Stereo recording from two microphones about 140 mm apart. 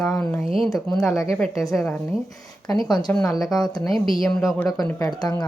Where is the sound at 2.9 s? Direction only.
30° left (ahead or behind).